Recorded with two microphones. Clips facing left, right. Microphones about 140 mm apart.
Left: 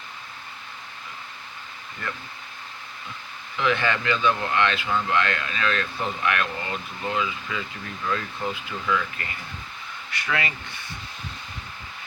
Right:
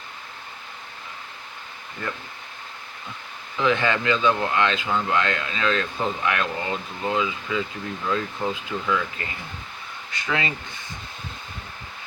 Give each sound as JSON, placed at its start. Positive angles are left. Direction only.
{"t": 3.6, "sound": "speech", "side_deg": -20}